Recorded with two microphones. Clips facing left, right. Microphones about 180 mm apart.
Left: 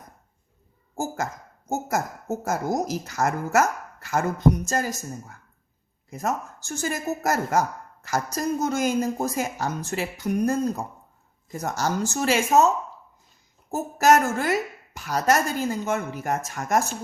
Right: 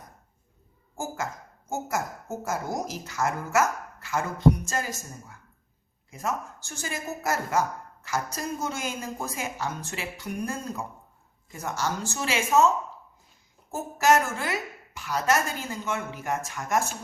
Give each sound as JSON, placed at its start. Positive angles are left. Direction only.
{"t": 0.9, "sound": "a sound", "side_deg": 40}
{"t": 1.7, "sound": "a woman's voice", "side_deg": 40}
{"t": 13.7, "sound": "a woman's voice", "side_deg": 40}